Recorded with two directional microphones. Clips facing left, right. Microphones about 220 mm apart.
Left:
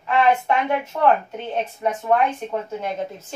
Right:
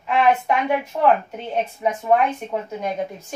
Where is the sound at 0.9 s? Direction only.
15° right (ahead or behind).